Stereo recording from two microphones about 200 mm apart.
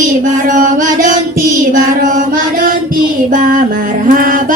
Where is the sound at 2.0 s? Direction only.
45° right (ahead or behind).